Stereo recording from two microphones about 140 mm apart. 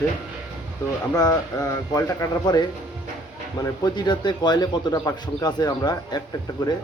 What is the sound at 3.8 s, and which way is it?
Speech, 30° left (ahead or behind).